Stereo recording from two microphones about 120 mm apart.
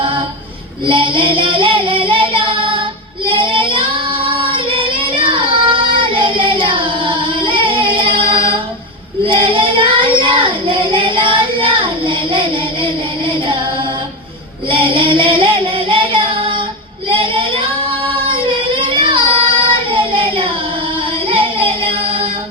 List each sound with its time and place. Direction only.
0.9 s child singing: 45° right (ahead or behind)
14.7 s child singing: 45° right (ahead or behind)
21.2 s music: 50° right (ahead or behind)